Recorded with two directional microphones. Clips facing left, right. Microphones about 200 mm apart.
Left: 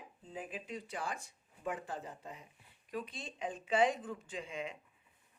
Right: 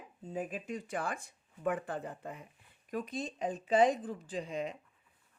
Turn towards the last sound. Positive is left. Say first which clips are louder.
# right 5 dB
turn(degrees=-40)  # may be behind; listen again after turning